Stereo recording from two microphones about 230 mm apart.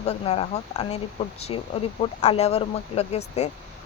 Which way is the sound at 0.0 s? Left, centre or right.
Left.